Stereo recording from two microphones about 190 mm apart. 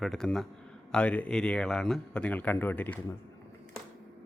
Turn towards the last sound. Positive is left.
turn(degrees=10)  # may be behind; listen again after turning